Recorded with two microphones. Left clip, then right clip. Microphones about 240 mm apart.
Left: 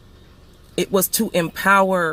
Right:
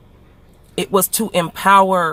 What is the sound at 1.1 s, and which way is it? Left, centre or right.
Speech, right.